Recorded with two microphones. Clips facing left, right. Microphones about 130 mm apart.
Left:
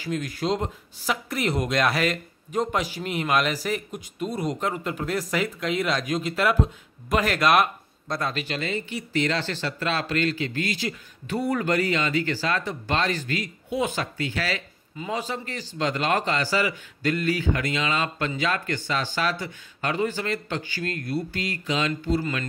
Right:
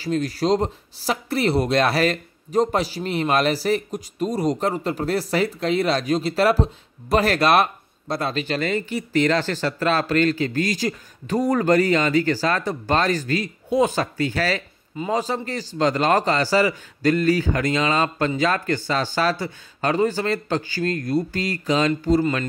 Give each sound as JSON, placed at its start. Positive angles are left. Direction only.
{"t": 0.0, "sound": "speech", "side_deg": -35}
{"t": 8.5, "sound": "speech", "side_deg": -50}